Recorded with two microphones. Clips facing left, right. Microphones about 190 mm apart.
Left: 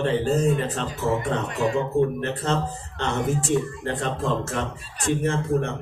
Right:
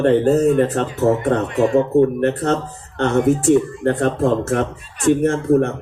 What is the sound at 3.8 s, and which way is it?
Speech, 55° right (ahead or behind).